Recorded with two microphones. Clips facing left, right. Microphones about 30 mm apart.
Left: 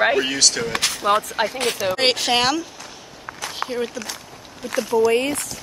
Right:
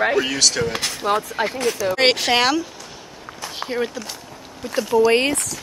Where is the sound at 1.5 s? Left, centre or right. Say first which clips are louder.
Right 1 dB; left.